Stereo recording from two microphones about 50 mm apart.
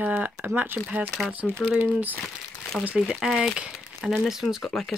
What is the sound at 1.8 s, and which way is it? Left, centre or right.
Speech, right.